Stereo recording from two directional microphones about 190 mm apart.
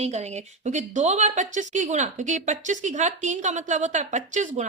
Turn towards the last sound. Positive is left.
turn(degrees=-40)  # may be behind; listen again after turning